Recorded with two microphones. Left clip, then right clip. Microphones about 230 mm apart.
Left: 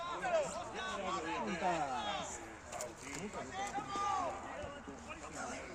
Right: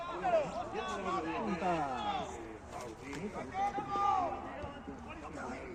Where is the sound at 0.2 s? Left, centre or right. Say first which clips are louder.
Right 5 dB; left.